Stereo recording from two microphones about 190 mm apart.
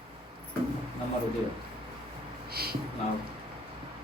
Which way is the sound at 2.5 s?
55° right (ahead or behind).